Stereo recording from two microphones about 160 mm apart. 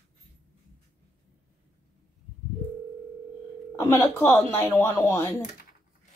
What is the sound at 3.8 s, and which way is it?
Speech, 15° left (ahead or behind).